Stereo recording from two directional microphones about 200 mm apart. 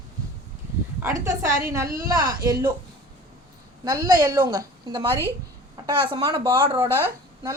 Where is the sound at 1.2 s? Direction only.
15° right (ahead or behind).